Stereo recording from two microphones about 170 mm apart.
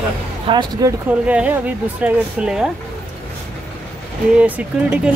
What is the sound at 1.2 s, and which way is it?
Speech, 10° right (ahead or behind).